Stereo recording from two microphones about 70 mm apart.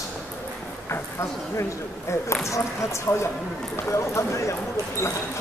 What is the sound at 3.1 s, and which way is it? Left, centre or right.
Speech, left.